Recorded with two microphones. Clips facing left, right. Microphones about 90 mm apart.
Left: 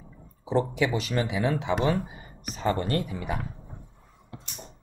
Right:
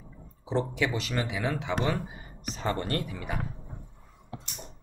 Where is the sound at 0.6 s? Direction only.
15° left (ahead or behind).